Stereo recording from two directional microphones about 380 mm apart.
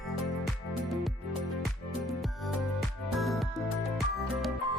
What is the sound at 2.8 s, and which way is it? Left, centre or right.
Music, centre.